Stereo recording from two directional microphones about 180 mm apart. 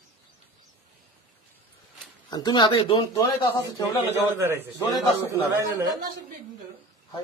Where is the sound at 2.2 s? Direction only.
25° left (ahead or behind).